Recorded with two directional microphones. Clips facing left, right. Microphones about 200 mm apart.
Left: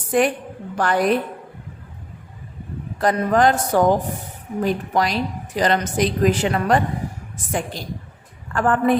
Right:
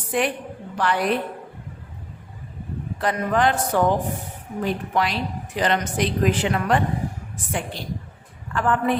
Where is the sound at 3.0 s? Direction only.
40° left (ahead or behind).